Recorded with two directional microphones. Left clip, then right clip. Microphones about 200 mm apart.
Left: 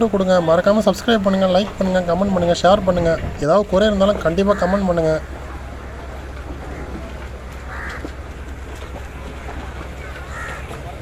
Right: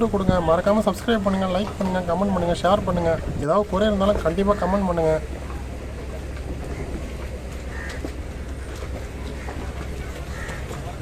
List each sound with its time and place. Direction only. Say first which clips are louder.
0.0 s speech: left 6 dB; 25° left (ahead or behind)
4.7 s speech: left 4 dB; 10° left (ahead or behind)
4.9 s speech: left 3 dB; 25° left (ahead or behind)